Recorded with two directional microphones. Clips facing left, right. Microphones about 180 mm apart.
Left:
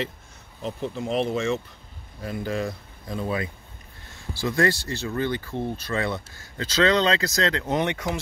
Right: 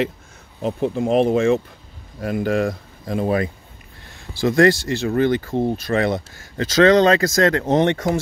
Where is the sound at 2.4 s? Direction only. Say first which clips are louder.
Right 7 dB; 90° right.